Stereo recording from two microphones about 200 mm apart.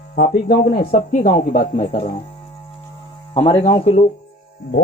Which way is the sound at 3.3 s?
30° left (ahead or behind).